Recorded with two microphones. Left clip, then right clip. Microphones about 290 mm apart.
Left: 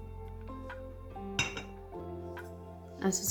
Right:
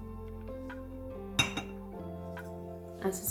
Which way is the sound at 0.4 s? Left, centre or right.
Centre.